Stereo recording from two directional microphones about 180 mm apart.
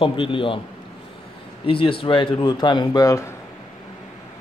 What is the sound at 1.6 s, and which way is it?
Speech, 30° left (ahead or behind).